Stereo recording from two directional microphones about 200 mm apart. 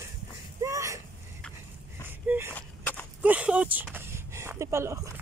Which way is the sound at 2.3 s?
10° right (ahead or behind).